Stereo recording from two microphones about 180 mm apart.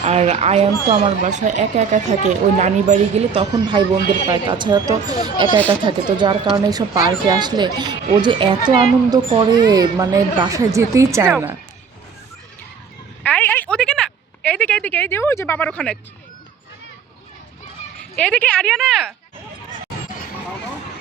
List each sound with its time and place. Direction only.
0.0 s speech: 35° right (ahead or behind)
3.6 s speech: 25° right (ahead or behind)
13.2 s a woman's voice: 10° left (ahead or behind)
18.2 s speech: 5° left (ahead or behind)